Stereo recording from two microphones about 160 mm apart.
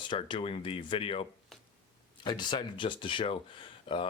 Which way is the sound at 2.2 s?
30° left (ahead or behind).